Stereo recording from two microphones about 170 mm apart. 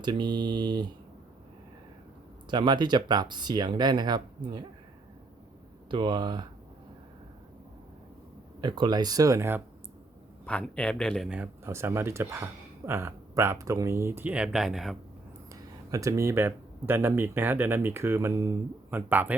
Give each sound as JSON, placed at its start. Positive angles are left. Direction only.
{"t": 0.0, "sound": "speech", "side_deg": -25}
{"t": 2.5, "sound": "speech", "side_deg": -25}
{"t": 5.9, "sound": "speech", "side_deg": -25}
{"t": 8.6, "sound": "speech", "side_deg": -25}
{"t": 10.4, "sound": "a man's voice", "side_deg": 5}
{"t": 11.3, "sound": "speech", "side_deg": -10}
{"t": 15.5, "sound": "speech", "side_deg": -20}